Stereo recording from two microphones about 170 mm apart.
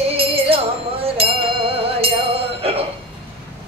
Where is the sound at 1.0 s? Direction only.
35° right (ahead or behind).